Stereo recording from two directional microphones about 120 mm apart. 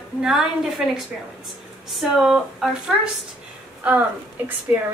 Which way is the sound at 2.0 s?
5° right (ahead or behind).